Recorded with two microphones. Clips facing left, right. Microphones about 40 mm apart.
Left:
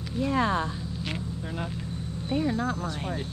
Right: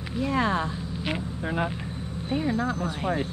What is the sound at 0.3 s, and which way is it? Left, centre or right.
Speech, right.